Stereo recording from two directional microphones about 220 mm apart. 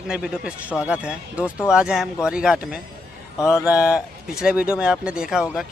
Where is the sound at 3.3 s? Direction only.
15° left (ahead or behind).